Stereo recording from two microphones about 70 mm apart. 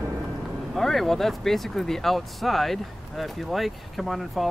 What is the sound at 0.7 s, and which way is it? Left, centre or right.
Speech, centre.